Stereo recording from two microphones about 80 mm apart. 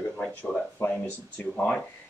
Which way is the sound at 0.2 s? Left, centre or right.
Centre.